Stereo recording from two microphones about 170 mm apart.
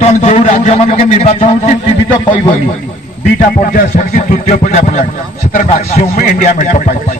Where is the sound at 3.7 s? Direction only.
55° left (ahead or behind).